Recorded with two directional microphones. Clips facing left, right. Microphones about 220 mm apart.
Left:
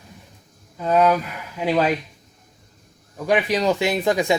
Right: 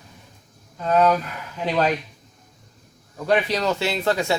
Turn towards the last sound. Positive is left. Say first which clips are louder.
# left 3 dB
turn(degrees=15)  # may be behind; listen again after turning